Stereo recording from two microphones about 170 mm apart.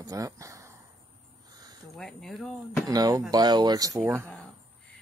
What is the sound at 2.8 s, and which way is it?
Speech, 20° right (ahead or behind).